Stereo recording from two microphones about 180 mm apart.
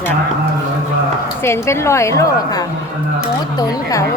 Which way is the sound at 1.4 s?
15° left (ahead or behind).